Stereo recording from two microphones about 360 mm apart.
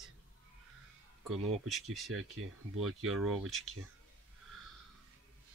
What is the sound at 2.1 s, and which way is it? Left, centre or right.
Speech, right.